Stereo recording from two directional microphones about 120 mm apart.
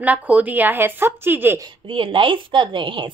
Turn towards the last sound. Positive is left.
turn(degrees=-45)  # may be behind; listen again after turning